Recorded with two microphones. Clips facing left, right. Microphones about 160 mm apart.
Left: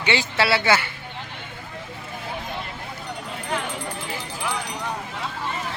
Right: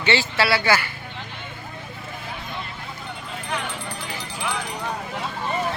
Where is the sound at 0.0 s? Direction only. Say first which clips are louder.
Right 1 dB; 15° left (ahead or behind).